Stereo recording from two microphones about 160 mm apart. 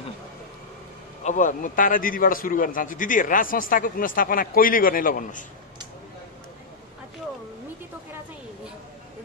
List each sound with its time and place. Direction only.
1.2 s a man's voice: 50° left (ahead or behind)